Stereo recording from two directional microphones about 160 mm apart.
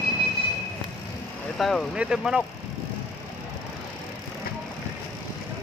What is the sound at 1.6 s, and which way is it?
Speech, centre (ahead or behind).